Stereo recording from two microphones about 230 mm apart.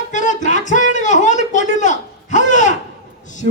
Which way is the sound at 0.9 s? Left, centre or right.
Left.